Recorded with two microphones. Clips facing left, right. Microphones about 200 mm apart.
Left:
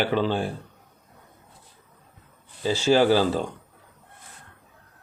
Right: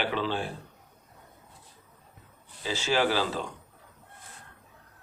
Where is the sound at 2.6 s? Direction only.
35° left (ahead or behind).